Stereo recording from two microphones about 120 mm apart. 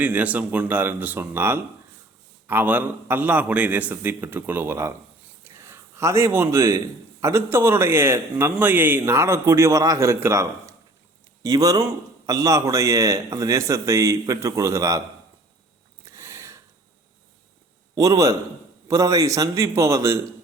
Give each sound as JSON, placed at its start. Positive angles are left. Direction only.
{"t": 0.0, "sound": "a man's voice", "side_deg": -10}
{"t": 16.0, "sound": "a sound", "side_deg": -25}
{"t": 17.9, "sound": "a man's voice", "side_deg": -30}